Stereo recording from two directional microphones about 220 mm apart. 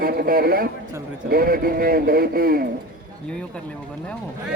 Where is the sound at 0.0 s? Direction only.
45° right (ahead or behind).